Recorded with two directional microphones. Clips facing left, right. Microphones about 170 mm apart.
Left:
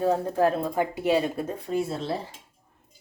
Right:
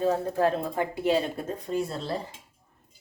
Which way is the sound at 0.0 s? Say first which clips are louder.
Left 2 dB; 10° left (ahead or behind).